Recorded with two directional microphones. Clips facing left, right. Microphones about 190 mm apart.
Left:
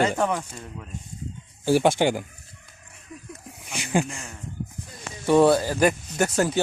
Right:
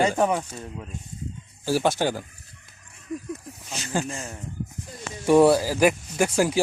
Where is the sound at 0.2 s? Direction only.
10° right (ahead or behind).